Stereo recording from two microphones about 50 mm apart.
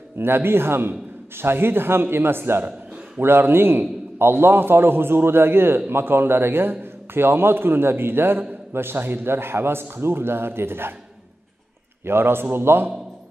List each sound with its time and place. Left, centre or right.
0.2 s a man's voice: right
12.0 s a man's voice: right